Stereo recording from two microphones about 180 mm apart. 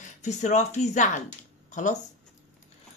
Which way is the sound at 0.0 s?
40° left (ahead or behind).